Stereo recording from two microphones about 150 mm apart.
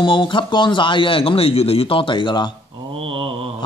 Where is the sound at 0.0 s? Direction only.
35° left (ahead or behind).